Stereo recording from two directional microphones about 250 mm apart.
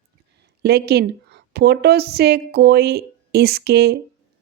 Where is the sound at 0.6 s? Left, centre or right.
Right.